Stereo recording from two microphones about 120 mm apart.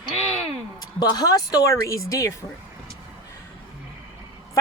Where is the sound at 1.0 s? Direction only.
35° left (ahead or behind).